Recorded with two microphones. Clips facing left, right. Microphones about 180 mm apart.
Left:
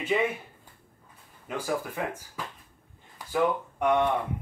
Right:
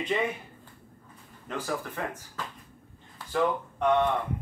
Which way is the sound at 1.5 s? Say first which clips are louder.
Left 2 dB; 10° left (ahead or behind).